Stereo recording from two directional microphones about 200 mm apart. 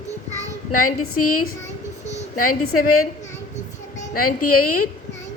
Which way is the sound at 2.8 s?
90° left.